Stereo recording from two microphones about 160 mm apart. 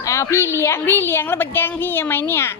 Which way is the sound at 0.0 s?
20° left (ahead or behind).